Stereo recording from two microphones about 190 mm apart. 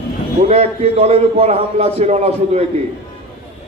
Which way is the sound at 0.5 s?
35° right (ahead or behind).